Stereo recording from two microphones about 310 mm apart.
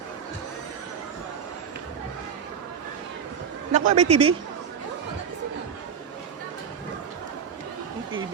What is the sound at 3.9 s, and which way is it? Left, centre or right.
Speech, right.